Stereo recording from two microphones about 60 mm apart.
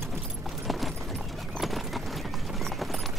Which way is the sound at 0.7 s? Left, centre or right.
Centre.